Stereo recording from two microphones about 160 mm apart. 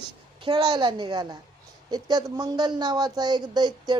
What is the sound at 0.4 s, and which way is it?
A woman's voice, 30° right (ahead or behind).